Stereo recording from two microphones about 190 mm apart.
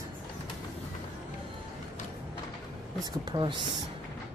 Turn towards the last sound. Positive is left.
turn(degrees=-25)  # may be behind; listen again after turning